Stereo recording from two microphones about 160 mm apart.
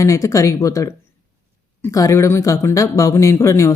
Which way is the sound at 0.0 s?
20° left (ahead or behind).